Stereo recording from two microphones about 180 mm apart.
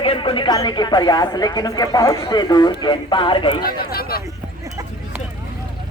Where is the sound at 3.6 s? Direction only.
55° left (ahead or behind).